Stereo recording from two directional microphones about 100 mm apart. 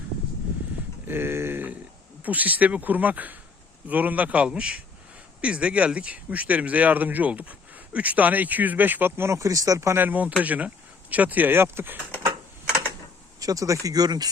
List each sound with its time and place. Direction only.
1.0 s a sound: 20° right (ahead or behind)
2.2 s speech: 15° right (ahead or behind)
10.0 s speech: 15° right (ahead or behind)
13.4 s speech: 35° right (ahead or behind)